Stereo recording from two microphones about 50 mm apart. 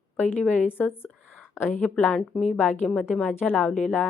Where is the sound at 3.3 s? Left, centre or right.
Left.